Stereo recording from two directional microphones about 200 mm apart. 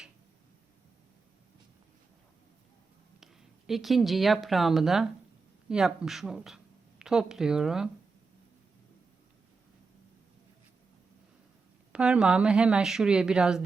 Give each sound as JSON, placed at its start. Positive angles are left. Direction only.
{"t": 3.7, "sound": "a woman's voice", "side_deg": 0}
{"t": 11.9, "sound": "a woman's voice", "side_deg": -5}